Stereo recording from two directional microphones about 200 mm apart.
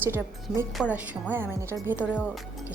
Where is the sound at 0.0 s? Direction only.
10° right (ahead or behind).